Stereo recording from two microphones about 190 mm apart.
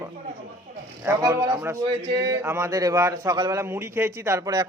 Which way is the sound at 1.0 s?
15° right (ahead or behind).